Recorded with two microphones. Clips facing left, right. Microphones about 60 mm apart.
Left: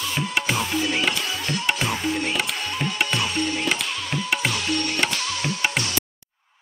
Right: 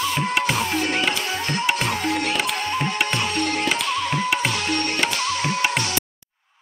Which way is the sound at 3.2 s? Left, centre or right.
Right.